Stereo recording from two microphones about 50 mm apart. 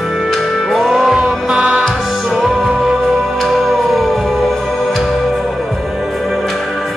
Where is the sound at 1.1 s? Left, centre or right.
Centre.